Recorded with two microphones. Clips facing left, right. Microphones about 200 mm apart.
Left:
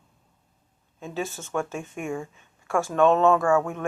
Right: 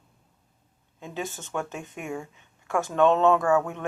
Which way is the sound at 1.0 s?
15° right (ahead or behind).